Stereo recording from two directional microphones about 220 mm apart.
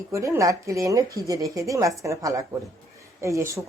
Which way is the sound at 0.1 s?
15° right (ahead or behind).